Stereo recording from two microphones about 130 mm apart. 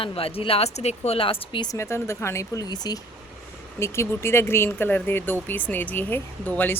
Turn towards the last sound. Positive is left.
turn(degrees=15)  # may be behind; listen again after turning